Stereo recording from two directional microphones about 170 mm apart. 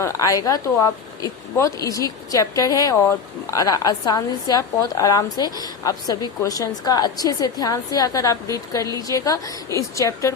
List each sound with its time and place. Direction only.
0.0 s a woman's voice: 20° left (ahead or behind)